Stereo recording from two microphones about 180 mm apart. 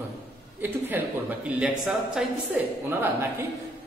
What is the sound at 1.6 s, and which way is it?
Speech, 5° right (ahead or behind).